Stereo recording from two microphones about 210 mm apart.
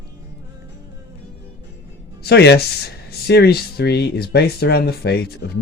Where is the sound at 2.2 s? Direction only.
50° left (ahead or behind).